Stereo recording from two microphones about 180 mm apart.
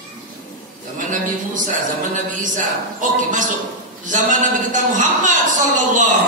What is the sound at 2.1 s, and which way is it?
A man's voice, 45° right (ahead or behind).